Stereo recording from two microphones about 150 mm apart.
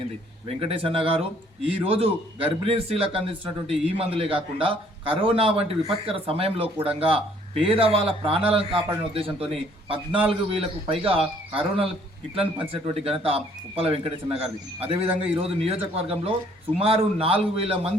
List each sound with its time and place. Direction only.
0.4 s a man's voice: 40° right (ahead or behind)